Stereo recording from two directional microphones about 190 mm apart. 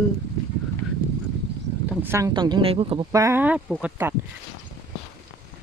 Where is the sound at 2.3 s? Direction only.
25° right (ahead or behind).